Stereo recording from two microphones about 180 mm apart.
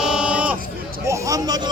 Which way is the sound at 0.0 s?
5° right (ahead or behind).